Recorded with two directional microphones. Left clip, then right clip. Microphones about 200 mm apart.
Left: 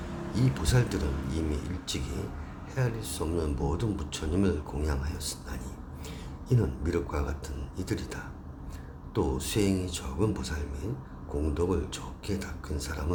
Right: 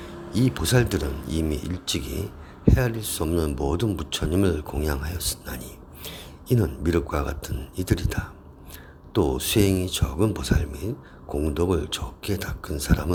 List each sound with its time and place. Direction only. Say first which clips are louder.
0.3 s speech: right 8 dB; 40° right (ahead or behind)